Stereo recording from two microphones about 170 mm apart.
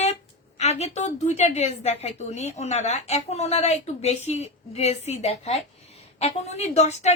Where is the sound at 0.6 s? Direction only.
40° left (ahead or behind).